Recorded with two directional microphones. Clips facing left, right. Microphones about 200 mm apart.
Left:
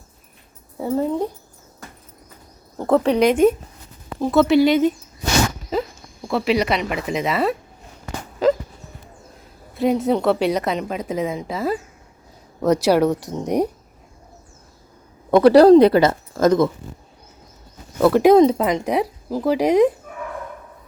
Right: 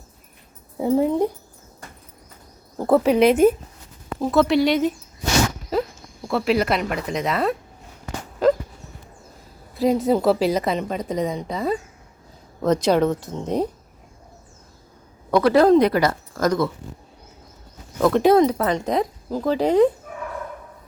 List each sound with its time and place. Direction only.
0.8 s speech: 15° right (ahead or behind)
2.7 s a woman's voice: 5° right (ahead or behind)
6.2 s a woman's voice: centre (ahead or behind)
9.7 s a woman's voice: centre (ahead or behind)
15.3 s a woman's voice: 25° left (ahead or behind)
17.9 s speech: 10° left (ahead or behind)